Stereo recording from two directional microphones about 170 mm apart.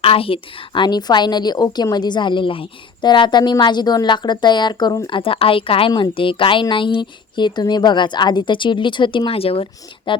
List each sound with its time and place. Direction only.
0.0 s a woman's voice: 35° left (ahead or behind)